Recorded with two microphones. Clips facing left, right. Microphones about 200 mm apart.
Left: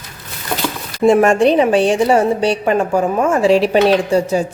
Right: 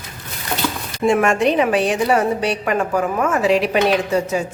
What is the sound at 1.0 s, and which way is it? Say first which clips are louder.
A woman's voice: left 5 dB; 35° left (ahead or behind).